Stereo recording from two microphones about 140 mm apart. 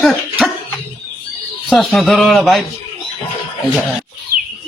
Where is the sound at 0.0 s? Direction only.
Centre (ahead or behind).